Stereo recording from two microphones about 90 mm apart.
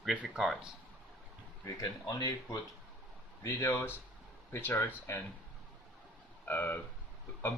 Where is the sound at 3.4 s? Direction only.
30° left (ahead or behind).